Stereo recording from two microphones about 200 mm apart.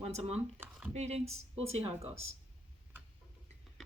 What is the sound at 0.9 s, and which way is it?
Speech, 35° right (ahead or behind).